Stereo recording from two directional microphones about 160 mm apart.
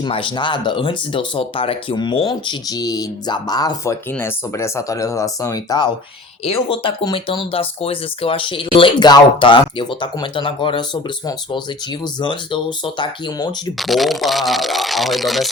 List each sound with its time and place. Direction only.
0.0 s speech: 30° left (ahead or behind)
4.1 s speech: 15° left (ahead or behind)
6.4 s speech: 35° left (ahead or behind)
13.7 s speech: centre (ahead or behind)